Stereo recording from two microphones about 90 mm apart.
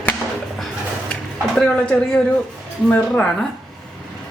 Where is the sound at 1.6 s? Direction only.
10° left (ahead or behind).